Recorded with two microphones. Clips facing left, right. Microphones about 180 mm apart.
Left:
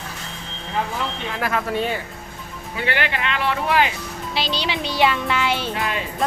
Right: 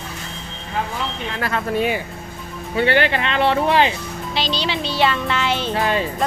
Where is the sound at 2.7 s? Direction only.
30° right (ahead or behind).